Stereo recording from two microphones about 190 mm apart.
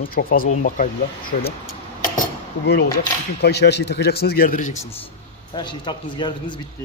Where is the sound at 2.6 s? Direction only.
60° left (ahead or behind); by 4.9 s 40° left (ahead or behind).